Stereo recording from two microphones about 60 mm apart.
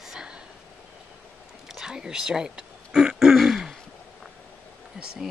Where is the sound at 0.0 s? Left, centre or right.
Centre.